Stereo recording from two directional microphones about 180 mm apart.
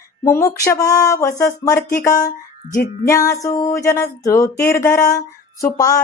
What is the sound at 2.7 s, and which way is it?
Music, 50° left (ahead or behind).